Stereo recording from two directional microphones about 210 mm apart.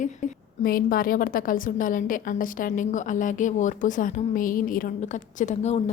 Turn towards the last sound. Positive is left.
turn(degrees=35)  # may be behind; listen again after turning